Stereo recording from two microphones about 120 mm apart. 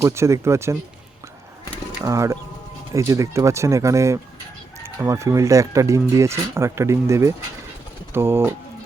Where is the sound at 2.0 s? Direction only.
25° right (ahead or behind).